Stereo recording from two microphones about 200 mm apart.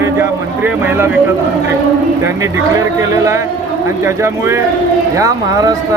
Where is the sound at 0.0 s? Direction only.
10° right (ahead or behind).